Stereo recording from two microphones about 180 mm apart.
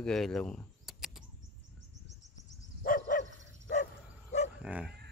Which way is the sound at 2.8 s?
50° left (ahead or behind).